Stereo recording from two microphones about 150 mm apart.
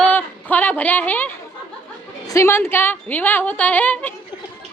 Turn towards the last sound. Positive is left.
turn(degrees=10)  # may be behind; listen again after turning